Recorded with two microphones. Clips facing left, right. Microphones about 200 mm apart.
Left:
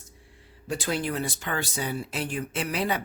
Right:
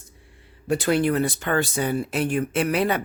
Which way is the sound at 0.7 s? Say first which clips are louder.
Right 8 dB; 60° right (ahead or behind).